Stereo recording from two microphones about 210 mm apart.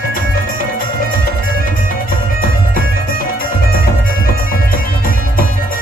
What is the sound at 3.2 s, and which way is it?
Music, 45° left (ahead or behind).